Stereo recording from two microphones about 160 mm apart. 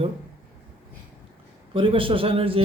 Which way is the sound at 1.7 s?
35° right (ahead or behind).